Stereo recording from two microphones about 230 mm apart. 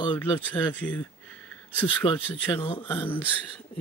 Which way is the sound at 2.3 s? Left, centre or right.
Centre.